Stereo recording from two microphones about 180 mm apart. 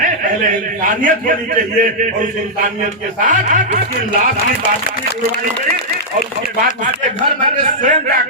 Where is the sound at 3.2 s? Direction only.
45° right (ahead or behind).